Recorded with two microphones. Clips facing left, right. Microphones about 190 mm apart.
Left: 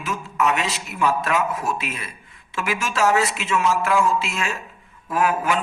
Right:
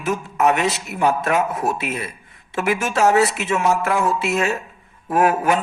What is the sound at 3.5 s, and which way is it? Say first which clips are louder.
Music: left 3 dB; 55° right (ahead or behind).